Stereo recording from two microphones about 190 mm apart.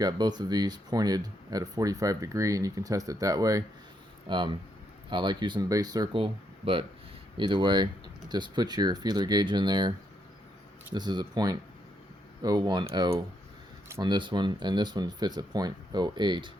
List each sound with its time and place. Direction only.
0.0 s speech: 20° right (ahead or behind)
10.9 s speech: 20° right (ahead or behind)
13.8 s speech: 15° right (ahead or behind)
14.1 s speech: 25° right (ahead or behind)